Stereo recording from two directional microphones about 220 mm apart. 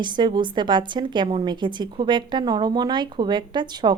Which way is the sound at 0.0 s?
20° right (ahead or behind).